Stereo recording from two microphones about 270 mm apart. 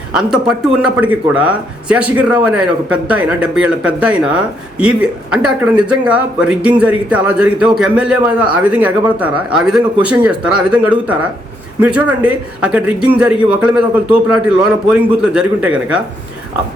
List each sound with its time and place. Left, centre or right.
0.1 s speech: centre